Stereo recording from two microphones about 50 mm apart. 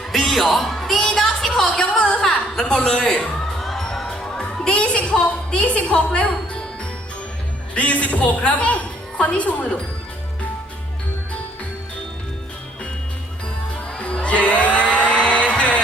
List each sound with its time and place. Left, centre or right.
0.1 s music: centre
2.0 s a sound: centre
2.2 s a woman's voice: centre
3.6 s music: centre
4.4 s a woman's voice: centre
7.8 s a woman's voice: left
14.0 s music: left